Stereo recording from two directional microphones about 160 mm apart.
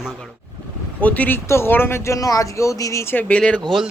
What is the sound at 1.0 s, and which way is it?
Speech, 10° left (ahead or behind).